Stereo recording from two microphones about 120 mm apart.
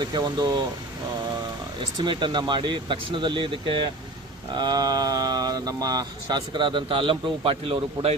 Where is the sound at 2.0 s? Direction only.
40° right (ahead or behind).